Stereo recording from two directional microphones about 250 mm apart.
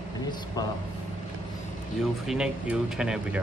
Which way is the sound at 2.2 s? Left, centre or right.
Centre.